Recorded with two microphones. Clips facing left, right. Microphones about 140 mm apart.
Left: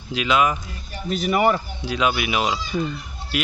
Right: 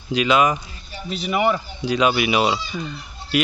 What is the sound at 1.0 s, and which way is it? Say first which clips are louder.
Speech: left 4 dB; 45° left (ahead or behind).